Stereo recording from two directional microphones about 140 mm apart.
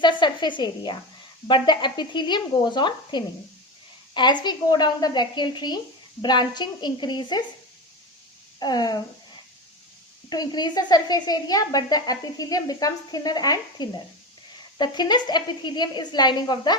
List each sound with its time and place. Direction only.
0.0 s a woman's voice: 35° left (ahead or behind)
8.5 s speech: 30° left (ahead or behind)
10.2 s a woman's voice: 30° left (ahead or behind)